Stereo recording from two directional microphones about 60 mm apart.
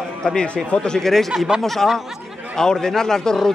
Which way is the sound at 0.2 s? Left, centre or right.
Centre.